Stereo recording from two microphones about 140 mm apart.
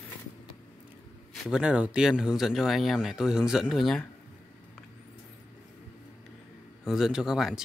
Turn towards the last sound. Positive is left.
turn(degrees=-5)  # may be behind; listen again after turning